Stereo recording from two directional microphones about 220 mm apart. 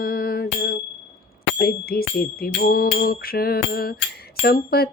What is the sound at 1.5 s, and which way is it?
Music, 45° left (ahead or behind).